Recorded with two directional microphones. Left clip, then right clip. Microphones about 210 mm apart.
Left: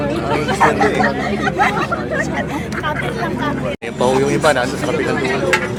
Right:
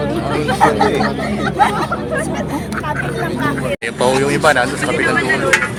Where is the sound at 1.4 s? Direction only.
20° left (ahead or behind).